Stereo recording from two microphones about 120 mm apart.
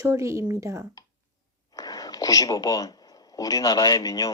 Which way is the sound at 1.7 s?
30° left (ahead or behind).